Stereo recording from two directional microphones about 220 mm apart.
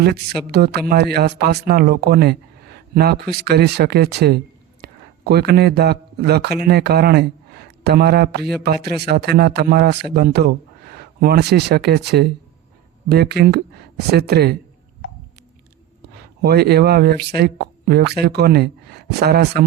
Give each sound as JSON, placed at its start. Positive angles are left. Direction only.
{"t": 0.0, "sound": "a man's voice", "side_deg": -45}
{"t": 16.4, "sound": "speech", "side_deg": -45}